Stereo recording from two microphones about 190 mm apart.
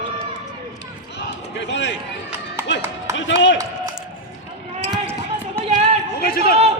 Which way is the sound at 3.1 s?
75° left (ahead or behind).